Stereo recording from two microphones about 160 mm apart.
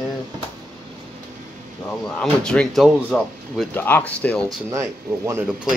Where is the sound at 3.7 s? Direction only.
10° left (ahead or behind).